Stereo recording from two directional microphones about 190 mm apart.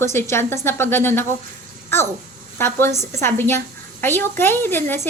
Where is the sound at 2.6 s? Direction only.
10° left (ahead or behind).